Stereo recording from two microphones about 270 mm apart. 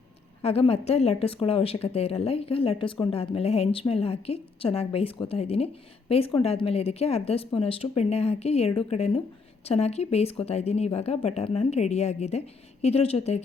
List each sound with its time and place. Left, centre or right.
0.4 s a woman's voice: left